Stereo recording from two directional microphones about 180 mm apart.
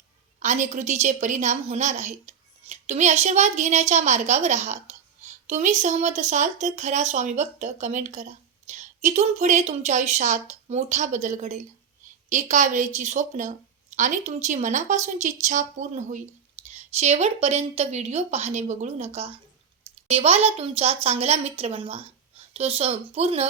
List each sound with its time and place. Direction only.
0.3 s a woman's voice: 40° right (ahead or behind)